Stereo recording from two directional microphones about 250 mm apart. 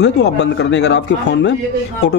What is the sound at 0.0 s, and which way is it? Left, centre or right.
Speech, left.